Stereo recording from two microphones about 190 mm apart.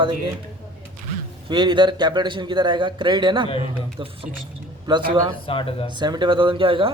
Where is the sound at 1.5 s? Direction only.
25° right (ahead or behind).